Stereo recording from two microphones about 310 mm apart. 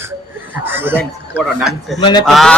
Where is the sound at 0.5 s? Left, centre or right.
Centre.